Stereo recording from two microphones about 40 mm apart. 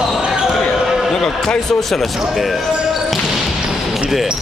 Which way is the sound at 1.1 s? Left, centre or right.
Centre.